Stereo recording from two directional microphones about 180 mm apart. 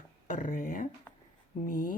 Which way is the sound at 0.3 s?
45° left (ahead or behind).